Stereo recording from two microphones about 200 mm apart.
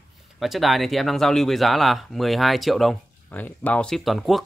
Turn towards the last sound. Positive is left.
turn(degrees=0)  # may be behind; listen again after turning